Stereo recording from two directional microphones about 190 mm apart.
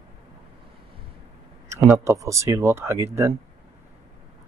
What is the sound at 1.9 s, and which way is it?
Speech, 15° right (ahead or behind).